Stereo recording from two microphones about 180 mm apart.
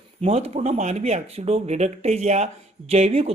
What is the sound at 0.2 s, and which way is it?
A man's voice, 35° right (ahead or behind).